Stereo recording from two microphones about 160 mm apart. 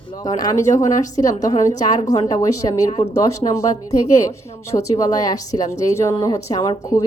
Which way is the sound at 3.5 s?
20° left (ahead or behind).